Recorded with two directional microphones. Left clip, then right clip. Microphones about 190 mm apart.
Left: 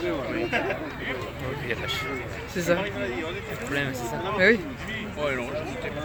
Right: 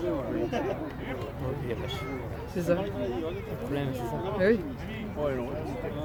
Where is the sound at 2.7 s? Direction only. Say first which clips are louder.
Left 3 dB; 5° left (ahead or behind).